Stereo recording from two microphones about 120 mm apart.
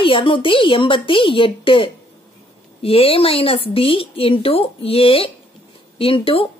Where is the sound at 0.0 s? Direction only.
45° left (ahead or behind).